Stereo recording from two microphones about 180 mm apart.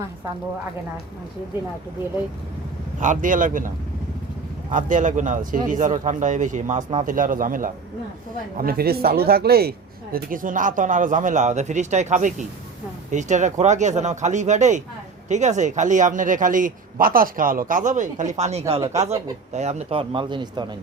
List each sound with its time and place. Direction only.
3.0 s speech: 45° right (ahead or behind)
4.7 s speech: 45° right (ahead or behind)
18.8 s speech: 20° right (ahead or behind)
19.5 s a man's voice: 35° right (ahead or behind)